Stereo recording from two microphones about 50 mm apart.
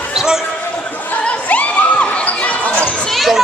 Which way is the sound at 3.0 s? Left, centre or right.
Centre.